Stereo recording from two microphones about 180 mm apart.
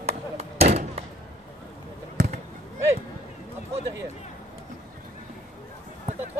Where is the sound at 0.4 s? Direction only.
35° right (ahead or behind).